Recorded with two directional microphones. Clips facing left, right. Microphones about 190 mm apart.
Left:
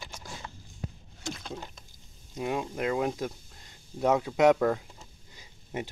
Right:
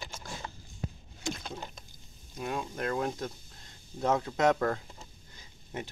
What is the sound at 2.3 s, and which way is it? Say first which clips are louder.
Speech: left 4 dB; 15° left (ahead or behind).